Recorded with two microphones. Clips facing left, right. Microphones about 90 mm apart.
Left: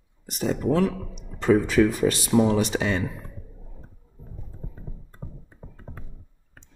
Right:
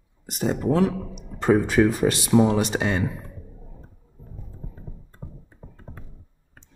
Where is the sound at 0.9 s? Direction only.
10° right (ahead or behind).